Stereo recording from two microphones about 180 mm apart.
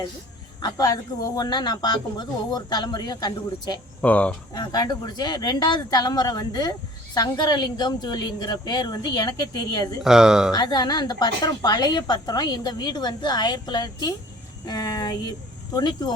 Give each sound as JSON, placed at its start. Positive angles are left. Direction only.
{"t": 0.6, "sound": "speech", "side_deg": 20}
{"t": 4.0, "sound": "speech", "side_deg": 5}
{"t": 4.5, "sound": "speech", "side_deg": 25}
{"t": 10.0, "sound": "speech", "side_deg": -5}
{"t": 10.5, "sound": "speech", "side_deg": 25}